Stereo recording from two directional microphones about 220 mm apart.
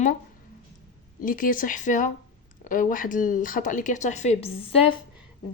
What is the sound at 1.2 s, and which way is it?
Speech, 40° left (ahead or behind).